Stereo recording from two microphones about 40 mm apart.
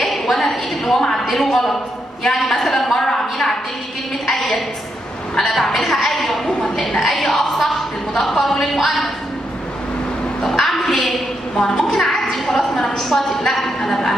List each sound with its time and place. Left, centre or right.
0.0 s a sound: centre
1.3 s a woman's voice: centre
5.5 s a woman's voice: centre
6.4 s a woman's voice: centre
10.4 s a sound: centre
11.5 s a woman's voice: centre